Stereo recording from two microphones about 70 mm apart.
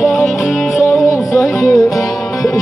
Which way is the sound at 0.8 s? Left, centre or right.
Left.